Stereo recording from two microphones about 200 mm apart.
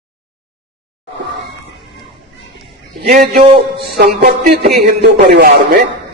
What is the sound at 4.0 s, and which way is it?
Speech, 45° right (ahead or behind).